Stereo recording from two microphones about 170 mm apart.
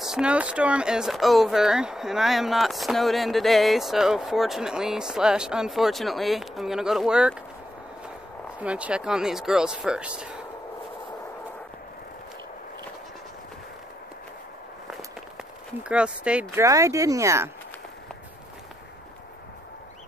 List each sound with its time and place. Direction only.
0.0 s speech: 5° right (ahead or behind)
8.5 s speech: 5° right (ahead or behind)
15.8 s speech: 5° right (ahead or behind)
16.6 s speech: 20° right (ahead or behind)